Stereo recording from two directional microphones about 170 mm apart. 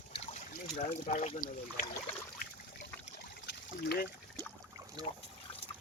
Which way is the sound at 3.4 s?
80° left.